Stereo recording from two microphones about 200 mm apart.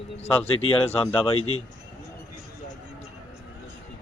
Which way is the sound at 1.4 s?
90° left.